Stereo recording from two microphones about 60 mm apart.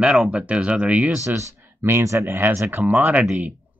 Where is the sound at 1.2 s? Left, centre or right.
Right.